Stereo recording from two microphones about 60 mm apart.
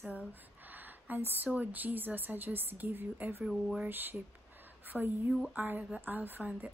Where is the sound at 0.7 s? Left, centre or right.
Right.